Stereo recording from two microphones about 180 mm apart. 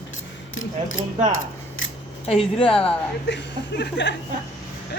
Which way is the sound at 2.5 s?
30° left (ahead or behind).